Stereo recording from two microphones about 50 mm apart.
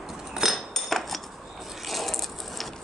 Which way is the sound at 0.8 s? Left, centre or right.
Centre.